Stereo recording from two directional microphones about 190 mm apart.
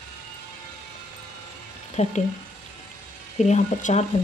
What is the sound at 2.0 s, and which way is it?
Speech, 35° left (ahead or behind).